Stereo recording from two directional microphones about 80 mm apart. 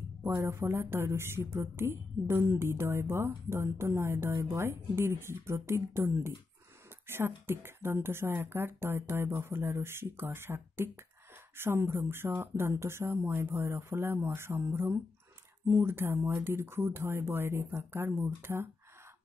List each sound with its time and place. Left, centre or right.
0.2 s a woman's voice: right